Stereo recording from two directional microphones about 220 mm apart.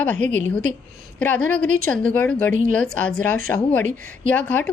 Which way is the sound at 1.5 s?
5° left (ahead or behind).